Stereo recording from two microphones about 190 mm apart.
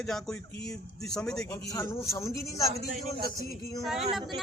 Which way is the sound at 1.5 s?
15° left (ahead or behind).